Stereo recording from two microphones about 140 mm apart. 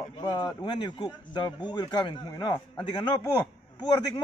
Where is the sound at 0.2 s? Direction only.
30° left (ahead or behind).